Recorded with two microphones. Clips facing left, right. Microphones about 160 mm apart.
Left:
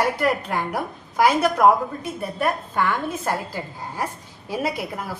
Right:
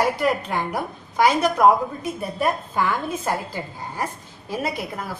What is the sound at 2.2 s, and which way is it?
A woman's voice, 5° right (ahead or behind).